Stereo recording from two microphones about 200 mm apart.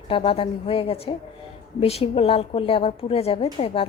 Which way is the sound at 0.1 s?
25° left (ahead or behind).